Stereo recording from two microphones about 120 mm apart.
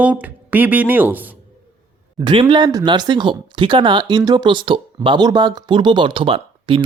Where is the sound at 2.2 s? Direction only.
40° right (ahead or behind).